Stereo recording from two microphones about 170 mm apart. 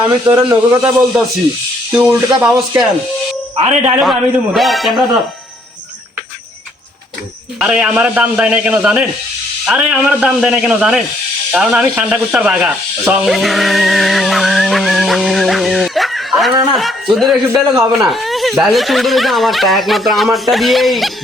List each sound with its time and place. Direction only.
0.3 s a man's voice: 25° right (ahead or behind)
0.9 s a man's voice: 10° right (ahead or behind)
3.6 s speech: 40° right (ahead or behind)
4.0 s speech: centre (ahead or behind)
7.6 s a man's voice: 5° right (ahead or behind)